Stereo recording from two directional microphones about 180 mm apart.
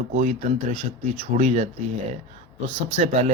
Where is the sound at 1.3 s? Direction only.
40° right (ahead or behind).